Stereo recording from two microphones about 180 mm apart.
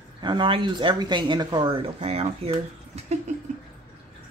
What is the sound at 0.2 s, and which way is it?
Speech, 25° right (ahead or behind).